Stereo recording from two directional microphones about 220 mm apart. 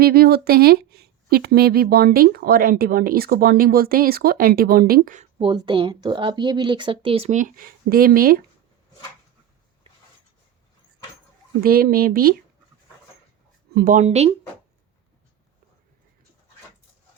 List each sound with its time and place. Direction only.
0.0 s speech: 45° right (ahead or behind)
11.6 s speech: 40° right (ahead or behind)
13.7 s speech: 35° right (ahead or behind)